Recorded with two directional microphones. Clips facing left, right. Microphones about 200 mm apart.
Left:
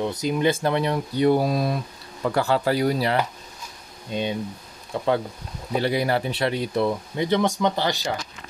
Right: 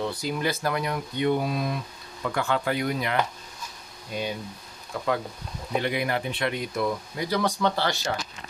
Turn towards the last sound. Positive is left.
turn(degrees=15)  # may be behind; listen again after turning